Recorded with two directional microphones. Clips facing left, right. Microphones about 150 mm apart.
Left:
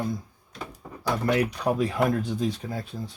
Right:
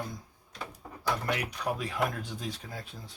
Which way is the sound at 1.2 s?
35° left (ahead or behind).